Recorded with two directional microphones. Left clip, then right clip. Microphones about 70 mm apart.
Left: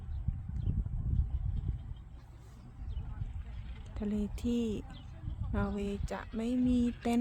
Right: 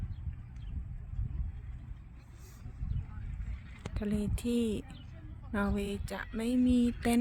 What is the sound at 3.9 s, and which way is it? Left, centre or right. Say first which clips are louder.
Speech: right 1 dB; centre.